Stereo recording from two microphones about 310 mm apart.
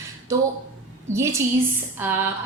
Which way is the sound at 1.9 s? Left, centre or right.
Centre.